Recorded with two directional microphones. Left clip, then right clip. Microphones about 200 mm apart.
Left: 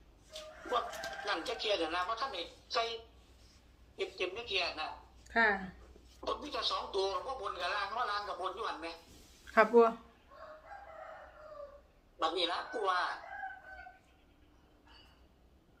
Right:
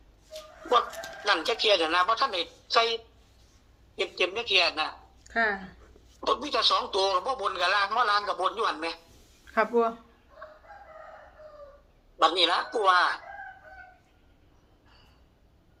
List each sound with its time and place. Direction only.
0.7 s speech: 60° right (ahead or behind)
5.2 s speech: 15° right (ahead or behind)
6.2 s speech: 60° right (ahead or behind)
9.5 s speech: centre (ahead or behind)
12.2 s speech: 60° right (ahead or behind)